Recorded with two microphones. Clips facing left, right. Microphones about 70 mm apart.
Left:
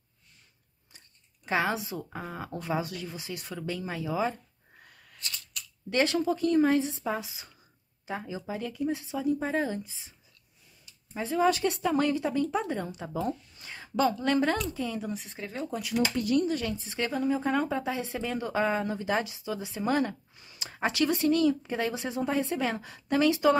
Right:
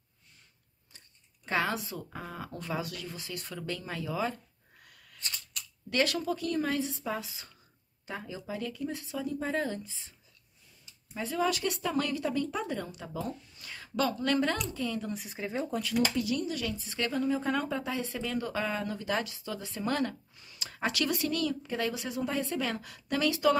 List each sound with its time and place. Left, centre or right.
0.9 s speech: centre
5.9 s speech: left
11.1 s speech: left
15.1 s speech: centre
16.2 s speech: left